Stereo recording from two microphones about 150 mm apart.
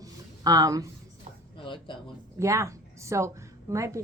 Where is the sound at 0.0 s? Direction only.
25° right (ahead or behind).